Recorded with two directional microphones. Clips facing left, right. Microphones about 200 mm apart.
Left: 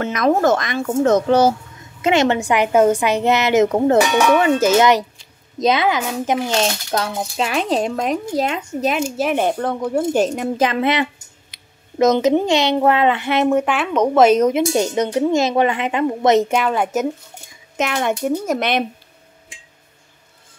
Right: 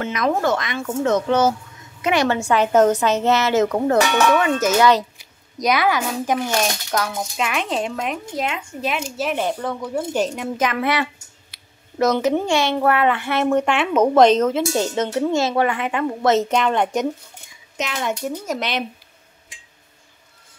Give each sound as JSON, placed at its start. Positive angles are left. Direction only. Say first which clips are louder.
{"t": 0.0, "sound": "speech", "louder": "left 4 dB", "side_deg": 45}
{"t": 2.0, "sound": "a woman's voice", "louder": "left 3 dB", "side_deg": 25}
{"t": 4.6, "sound": "a woman's voice", "louder": "left 2 dB", "side_deg": 30}
{"t": 10.7, "sound": "a woman's voice", "louder": "left 3 dB", "side_deg": 20}
{"t": 13.5, "sound": "a woman's voice", "louder": "left 1 dB", "side_deg": 5}
{"t": 14.2, "sound": "a woman's voice", "louder": "left 2 dB", "side_deg": 10}
{"t": 17.7, "sound": "speech", "louder": "left 5 dB", "side_deg": 55}